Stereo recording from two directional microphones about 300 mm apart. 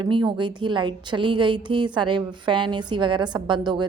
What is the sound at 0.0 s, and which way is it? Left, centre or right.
A woman's voice, centre.